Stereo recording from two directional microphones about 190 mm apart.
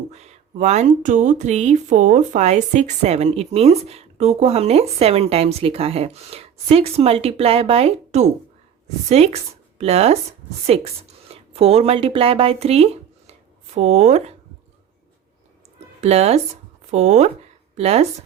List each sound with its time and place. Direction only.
0.1 s speech: 35° right (ahead or behind)
16.0 s speech: 35° right (ahead or behind)